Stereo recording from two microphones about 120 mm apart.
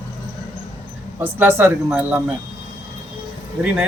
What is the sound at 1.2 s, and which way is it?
A man's voice, 15° right (ahead or behind).